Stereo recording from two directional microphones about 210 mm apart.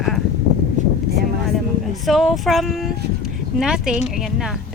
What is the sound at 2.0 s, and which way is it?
Speech, centre (ahead or behind).